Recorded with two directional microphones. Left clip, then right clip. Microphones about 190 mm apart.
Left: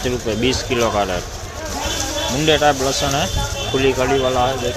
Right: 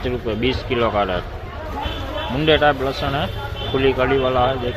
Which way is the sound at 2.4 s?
15° left (ahead or behind).